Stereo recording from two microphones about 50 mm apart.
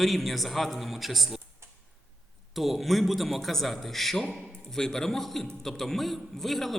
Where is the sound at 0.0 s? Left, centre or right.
Centre.